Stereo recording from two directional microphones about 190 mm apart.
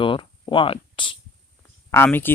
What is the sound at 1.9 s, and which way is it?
Speech, 10° left (ahead or behind).